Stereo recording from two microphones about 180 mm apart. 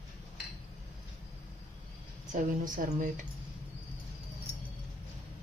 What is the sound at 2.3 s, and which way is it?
Speech, 45° right (ahead or behind).